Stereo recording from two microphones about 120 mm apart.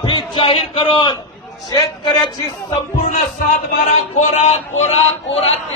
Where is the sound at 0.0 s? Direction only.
45° left (ahead or behind).